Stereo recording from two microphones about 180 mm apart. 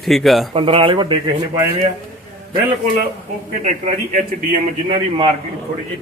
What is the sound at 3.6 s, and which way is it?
Speech, 40° right (ahead or behind).